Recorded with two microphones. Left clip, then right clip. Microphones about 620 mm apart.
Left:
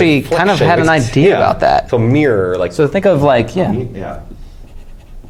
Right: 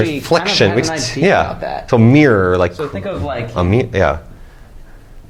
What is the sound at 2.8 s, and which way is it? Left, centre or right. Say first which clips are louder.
Speech: left 11 dB; left.